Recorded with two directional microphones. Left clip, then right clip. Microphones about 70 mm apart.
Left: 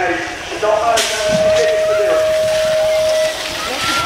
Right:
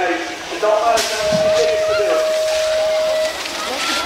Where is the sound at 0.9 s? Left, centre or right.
Left.